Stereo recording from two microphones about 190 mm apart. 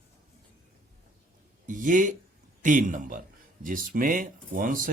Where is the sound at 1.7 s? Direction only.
45° right (ahead or behind).